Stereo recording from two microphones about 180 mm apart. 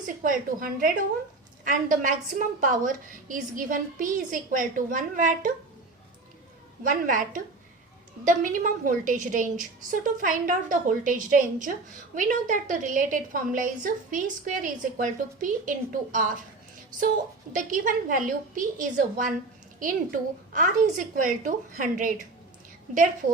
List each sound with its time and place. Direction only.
0.2 s a woman's voice: 50° right (ahead or behind)
6.8 s a woman's voice: 50° right (ahead or behind)
17.5 s a woman's voice: 50° right (ahead or behind)
20.5 s a woman's voice: 45° right (ahead or behind)